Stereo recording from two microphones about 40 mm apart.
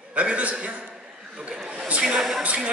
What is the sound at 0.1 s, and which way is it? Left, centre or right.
Speech, right.